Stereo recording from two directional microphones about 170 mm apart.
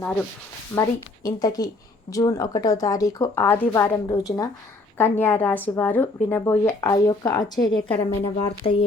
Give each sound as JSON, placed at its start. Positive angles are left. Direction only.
{"t": 0.0, "sound": "speech", "side_deg": 5}
{"t": 0.8, "sound": "a woman's voice", "side_deg": 20}